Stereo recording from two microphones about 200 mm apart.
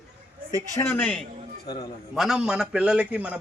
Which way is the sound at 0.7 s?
10° left (ahead or behind).